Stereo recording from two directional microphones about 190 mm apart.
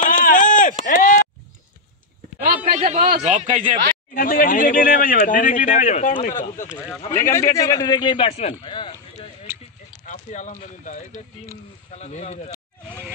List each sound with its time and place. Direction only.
0.0 s a sound: 45° left (ahead or behind)
2.4 s a sound: 40° right (ahead or behind)
3.3 s speech: 40° right (ahead or behind)
4.1 s speech: 50° left (ahead or behind)
7.1 s a man's voice: 15° left (ahead or behind)
10.0 s speech: 40° left (ahead or behind)